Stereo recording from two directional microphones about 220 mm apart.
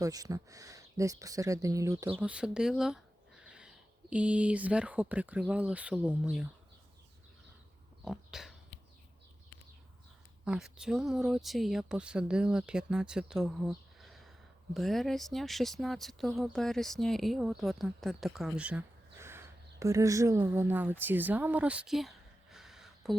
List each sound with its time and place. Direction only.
0.0 s speech: 15° right (ahead or behind)
2.1 s speech: 5° right (ahead or behind)
8.0 s a sound: centre (ahead or behind)
10.4 s speech: 5° right (ahead or behind)